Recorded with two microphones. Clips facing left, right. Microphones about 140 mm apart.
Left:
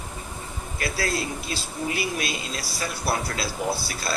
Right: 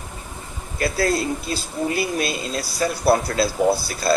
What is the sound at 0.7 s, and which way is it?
A man's voice, 40° right (ahead or behind).